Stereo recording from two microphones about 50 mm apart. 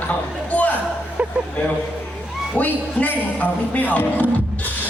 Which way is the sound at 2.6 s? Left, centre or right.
Left.